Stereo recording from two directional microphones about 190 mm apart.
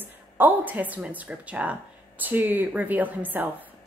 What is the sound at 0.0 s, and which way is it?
Speech, 10° right (ahead or behind).